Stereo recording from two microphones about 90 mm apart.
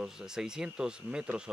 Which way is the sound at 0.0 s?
5° right (ahead or behind).